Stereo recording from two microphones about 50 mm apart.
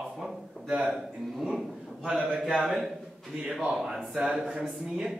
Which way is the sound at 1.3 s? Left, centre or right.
Centre.